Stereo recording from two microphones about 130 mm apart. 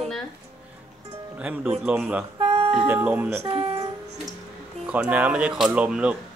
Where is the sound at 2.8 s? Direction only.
15° right (ahead or behind).